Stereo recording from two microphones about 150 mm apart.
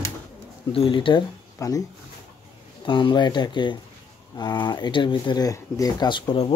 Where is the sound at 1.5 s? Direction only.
20° left (ahead or behind).